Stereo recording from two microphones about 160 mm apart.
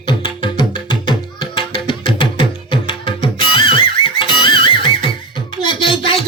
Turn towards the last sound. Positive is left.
turn(degrees=35)  # may be behind; listen again after turning